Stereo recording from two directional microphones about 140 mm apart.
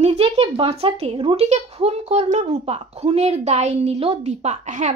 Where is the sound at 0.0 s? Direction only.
50° right (ahead or behind).